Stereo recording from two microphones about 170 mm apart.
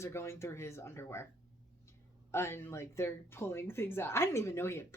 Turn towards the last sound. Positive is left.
turn(degrees=15)  # may be behind; listen again after turning